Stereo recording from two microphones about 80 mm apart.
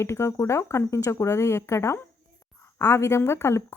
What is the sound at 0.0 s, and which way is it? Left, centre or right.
Speech, left.